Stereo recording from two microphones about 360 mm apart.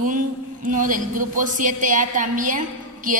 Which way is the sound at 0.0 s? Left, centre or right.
Right.